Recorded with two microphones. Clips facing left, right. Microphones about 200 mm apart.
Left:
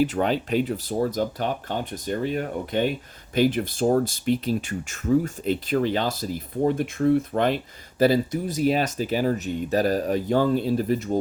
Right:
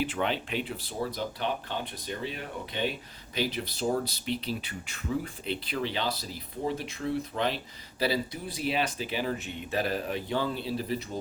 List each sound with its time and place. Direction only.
0.0 s speech: 40° left (ahead or behind)